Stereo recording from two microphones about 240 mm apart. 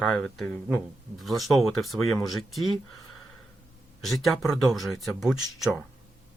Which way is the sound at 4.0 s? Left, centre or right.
Centre.